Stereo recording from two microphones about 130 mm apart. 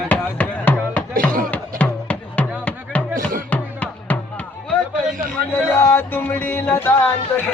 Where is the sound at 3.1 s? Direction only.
90° right.